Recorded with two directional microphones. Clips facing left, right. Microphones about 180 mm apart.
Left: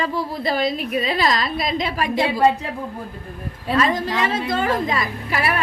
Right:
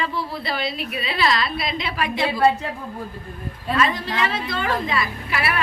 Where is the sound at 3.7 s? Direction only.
40° left (ahead or behind).